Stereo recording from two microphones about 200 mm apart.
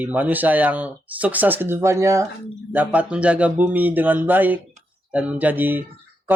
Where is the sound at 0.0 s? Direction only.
10° right (ahead or behind).